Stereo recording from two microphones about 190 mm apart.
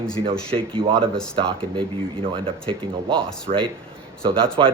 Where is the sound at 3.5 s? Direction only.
45° right (ahead or behind).